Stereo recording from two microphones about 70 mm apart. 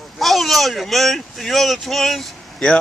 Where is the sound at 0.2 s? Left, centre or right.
Centre.